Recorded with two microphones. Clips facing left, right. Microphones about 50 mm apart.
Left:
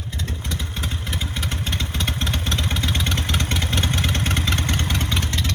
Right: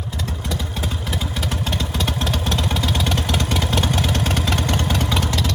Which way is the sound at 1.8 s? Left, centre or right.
Left.